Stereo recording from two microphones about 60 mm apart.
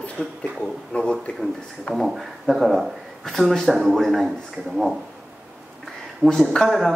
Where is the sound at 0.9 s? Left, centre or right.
Left.